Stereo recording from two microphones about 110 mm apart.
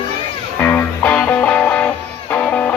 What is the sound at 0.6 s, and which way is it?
Music, 15° left (ahead or behind).